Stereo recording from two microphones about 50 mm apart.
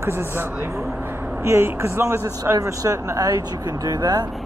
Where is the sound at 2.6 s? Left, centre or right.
Right.